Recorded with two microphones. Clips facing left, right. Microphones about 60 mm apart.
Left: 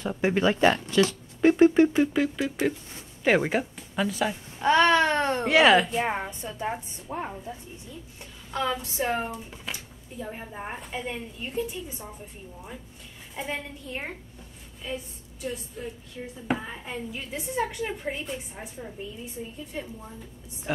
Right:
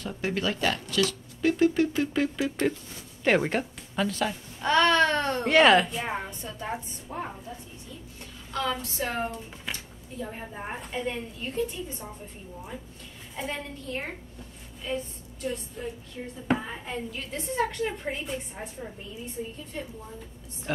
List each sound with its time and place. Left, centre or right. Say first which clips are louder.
0.0 s speech: left 6 dB; centre
2.1 s a woman's voice: left 1 dB; centre; by 5.4 s left
5.4 s a woman's voice: even; centre
5.9 s a child's voice: left 4 dB; centre
7.5 s a child's voice: left 2 dB; left; by 12.2 s centre
13.8 s a child's voice: right 1 dB; centre
19.7 s a child's voice: left 1 dB; centre